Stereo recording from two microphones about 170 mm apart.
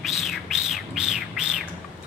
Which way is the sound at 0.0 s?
Centre (ahead or behind).